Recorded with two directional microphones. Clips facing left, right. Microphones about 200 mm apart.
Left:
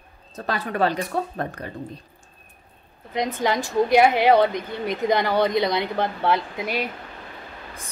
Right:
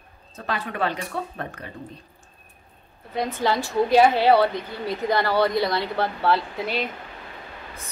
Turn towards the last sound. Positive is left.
turn(degrees=15)  # may be behind; listen again after turning